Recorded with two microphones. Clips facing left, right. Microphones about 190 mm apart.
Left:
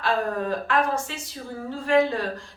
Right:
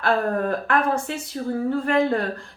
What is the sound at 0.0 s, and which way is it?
Speech, 55° right (ahead or behind).